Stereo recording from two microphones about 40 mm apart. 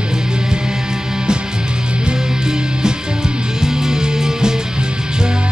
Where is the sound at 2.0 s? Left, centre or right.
Centre.